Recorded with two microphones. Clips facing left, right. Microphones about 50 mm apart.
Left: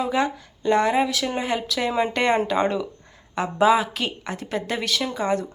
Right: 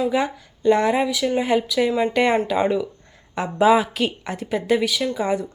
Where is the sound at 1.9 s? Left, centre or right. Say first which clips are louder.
Right 2 dB; centre.